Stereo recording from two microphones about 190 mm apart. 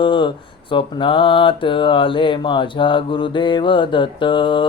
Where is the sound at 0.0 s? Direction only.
25° left (ahead or behind).